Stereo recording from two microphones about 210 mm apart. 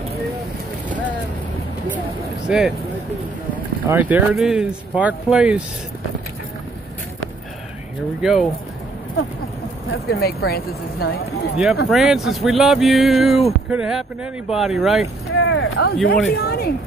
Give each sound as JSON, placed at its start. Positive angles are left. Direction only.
{"t": 2.4, "sound": "speech", "side_deg": 0}
{"t": 3.8, "sound": "speech", "side_deg": -10}
{"t": 8.2, "sound": "speech", "side_deg": 0}
{"t": 10.1, "sound": "a woman's voice", "side_deg": 50}
{"t": 11.5, "sound": "speech", "side_deg": -5}
{"t": 15.3, "sound": "speech", "side_deg": 65}
{"t": 16.3, "sound": "a woman's voice", "side_deg": 50}